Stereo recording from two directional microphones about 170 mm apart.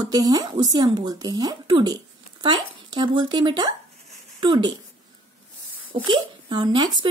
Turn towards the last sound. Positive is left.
turn(degrees=-25)  # may be behind; listen again after turning